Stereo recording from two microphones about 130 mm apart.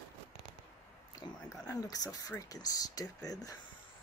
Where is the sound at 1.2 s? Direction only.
30° left (ahead or behind).